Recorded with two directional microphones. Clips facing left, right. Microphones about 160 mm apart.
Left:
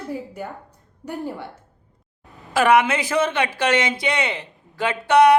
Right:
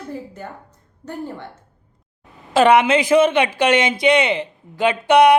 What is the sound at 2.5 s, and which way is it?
Speech, 25° right (ahead or behind).